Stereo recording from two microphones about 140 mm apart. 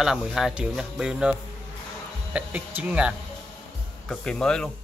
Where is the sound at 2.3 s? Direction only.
10° right (ahead or behind).